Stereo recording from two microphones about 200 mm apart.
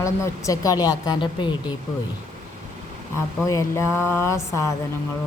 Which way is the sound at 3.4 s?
15° left (ahead or behind).